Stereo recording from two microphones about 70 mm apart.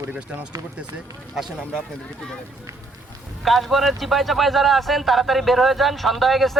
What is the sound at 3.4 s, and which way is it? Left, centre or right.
A man's voice, centre.